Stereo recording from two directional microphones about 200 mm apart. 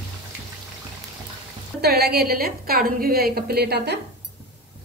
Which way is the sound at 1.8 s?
50° right (ahead or behind).